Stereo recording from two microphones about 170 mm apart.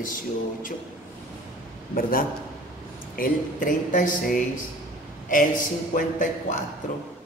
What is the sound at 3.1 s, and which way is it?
Speech, 55° left (ahead or behind).